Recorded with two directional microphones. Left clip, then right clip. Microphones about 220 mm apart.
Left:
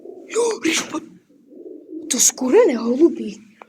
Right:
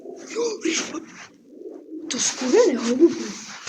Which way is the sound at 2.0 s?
40° left (ahead or behind).